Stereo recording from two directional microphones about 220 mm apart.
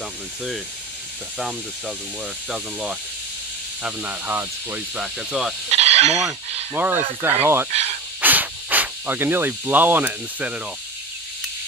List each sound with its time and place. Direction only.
2.5 s speech: 5° right (ahead or behind)
5.7 s fowl: 30° right (ahead or behind)
6.2 s speech: 10° right (ahead or behind)